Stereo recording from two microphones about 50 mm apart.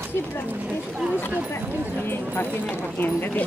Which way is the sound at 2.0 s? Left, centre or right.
Left.